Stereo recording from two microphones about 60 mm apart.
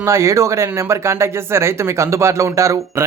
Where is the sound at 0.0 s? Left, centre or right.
Right.